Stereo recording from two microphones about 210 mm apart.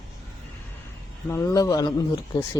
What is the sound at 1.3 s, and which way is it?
Speech, 15° left (ahead or behind).